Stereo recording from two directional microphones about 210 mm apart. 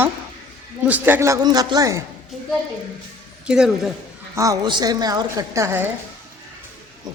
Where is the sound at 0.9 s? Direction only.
10° right (ahead or behind).